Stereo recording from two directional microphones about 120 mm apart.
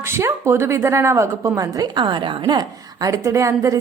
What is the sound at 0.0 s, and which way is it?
A woman's voice, 20° right (ahead or behind).